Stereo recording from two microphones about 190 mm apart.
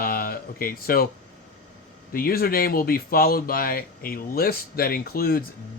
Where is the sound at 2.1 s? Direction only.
50° left (ahead or behind).